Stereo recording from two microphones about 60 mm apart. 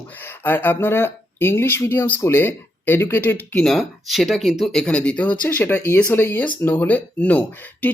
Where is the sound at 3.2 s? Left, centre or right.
Left.